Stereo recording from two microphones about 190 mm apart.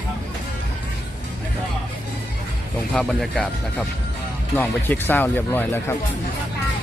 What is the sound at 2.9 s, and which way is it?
Speech, centre (ahead or behind).